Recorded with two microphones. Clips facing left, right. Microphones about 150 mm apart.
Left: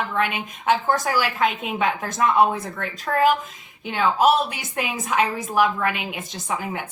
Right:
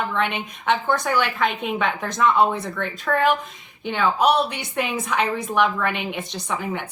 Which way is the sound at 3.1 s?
25° left (ahead or behind).